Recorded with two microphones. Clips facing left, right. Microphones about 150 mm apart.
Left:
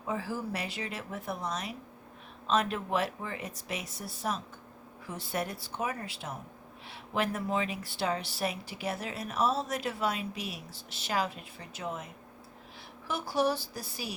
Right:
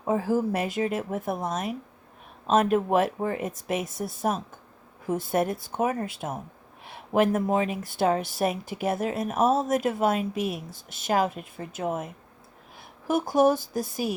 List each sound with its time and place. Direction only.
0.0 s speech: 50° right (ahead or behind)
13.1 s speech: 50° right (ahead or behind)